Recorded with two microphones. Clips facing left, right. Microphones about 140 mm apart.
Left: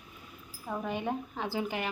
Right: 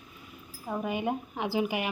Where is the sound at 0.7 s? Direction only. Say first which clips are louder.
Right 3 dB; 10° right (ahead or behind).